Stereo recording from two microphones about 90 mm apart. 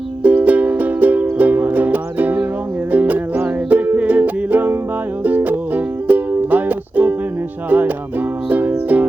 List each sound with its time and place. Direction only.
0.2 s music: 15° right (ahead or behind)